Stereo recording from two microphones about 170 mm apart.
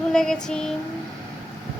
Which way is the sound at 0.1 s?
5° left (ahead or behind).